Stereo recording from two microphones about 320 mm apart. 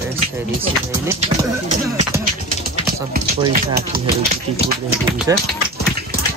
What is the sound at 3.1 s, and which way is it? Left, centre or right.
Speech, right.